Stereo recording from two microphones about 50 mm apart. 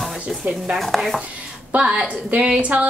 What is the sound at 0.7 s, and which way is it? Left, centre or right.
Speech, centre.